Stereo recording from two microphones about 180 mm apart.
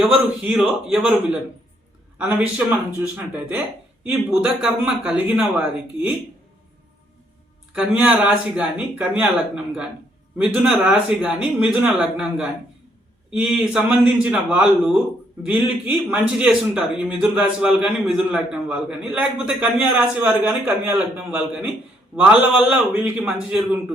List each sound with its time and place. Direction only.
0.0 s a man's voice: 5° right (ahead or behind)
7.7 s speech: 5° right (ahead or behind)
10.3 s a man's voice: 5° right (ahead or behind)